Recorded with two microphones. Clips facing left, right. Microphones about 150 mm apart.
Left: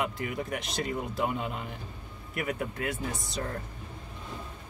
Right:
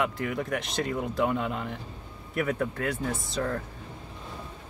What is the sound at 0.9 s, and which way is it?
Speech, 10° left (ahead or behind).